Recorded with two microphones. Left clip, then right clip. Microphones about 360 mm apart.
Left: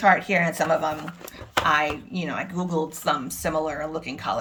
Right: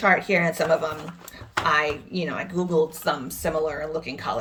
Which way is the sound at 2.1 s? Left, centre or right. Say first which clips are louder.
Right 2 dB; centre.